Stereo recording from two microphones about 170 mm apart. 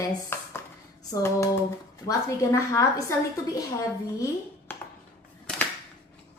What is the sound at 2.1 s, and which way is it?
A woman's voice, 20° left (ahead or behind).